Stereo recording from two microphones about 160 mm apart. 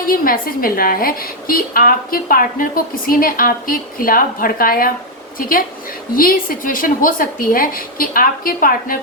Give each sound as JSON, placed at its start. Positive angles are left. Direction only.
{"t": 0.0, "sound": "a woman's voice", "side_deg": 65}